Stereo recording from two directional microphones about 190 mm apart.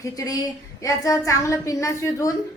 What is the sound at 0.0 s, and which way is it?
A woman's voice, 15° left (ahead or behind).